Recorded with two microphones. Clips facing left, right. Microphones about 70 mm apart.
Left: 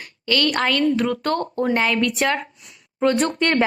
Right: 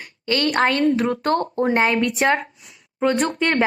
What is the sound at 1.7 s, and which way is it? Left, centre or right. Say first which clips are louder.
Speech: right 2 dB; right.